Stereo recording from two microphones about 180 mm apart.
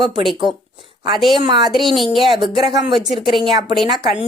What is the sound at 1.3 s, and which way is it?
Speech, 25° right (ahead or behind).